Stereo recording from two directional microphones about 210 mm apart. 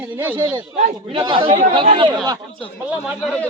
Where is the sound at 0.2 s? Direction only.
10° right (ahead or behind).